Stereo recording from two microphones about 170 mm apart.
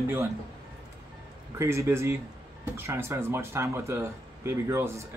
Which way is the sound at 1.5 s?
15° right (ahead or behind).